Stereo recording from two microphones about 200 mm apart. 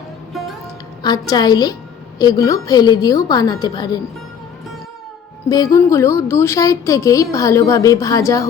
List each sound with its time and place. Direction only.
1.0 s a woman's voice: 20° left (ahead or behind)
5.5 s a woman's voice: 20° left (ahead or behind)